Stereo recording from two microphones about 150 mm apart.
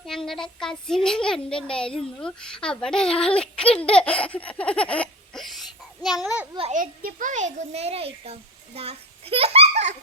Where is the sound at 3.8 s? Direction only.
5° left (ahead or behind).